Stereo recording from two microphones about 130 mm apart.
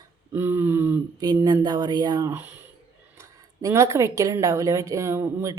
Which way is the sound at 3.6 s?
25° right (ahead or behind).